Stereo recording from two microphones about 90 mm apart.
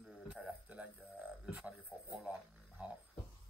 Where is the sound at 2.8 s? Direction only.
15° right (ahead or behind).